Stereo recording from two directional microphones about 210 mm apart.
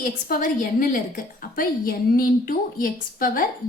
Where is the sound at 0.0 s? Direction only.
40° left (ahead or behind).